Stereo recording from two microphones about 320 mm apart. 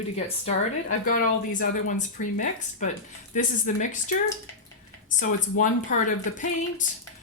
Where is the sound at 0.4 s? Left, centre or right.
Left.